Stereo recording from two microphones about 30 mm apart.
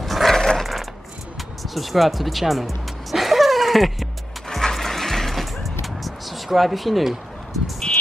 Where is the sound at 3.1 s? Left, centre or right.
Centre.